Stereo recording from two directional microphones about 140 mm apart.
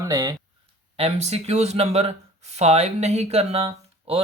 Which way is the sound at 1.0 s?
50° right (ahead or behind).